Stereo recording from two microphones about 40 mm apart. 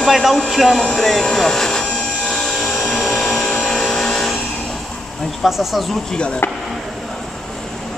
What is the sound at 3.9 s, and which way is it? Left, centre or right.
Vehicle, centre.